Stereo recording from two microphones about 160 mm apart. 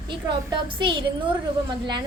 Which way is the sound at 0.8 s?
30° right (ahead or behind).